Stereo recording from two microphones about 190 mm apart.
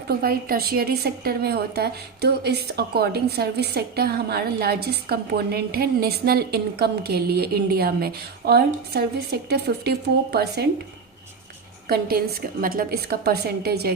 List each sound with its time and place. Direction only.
0.1 s a woman's voice: 50° right (ahead or behind)
11.9 s a woman's voice: 55° right (ahead or behind)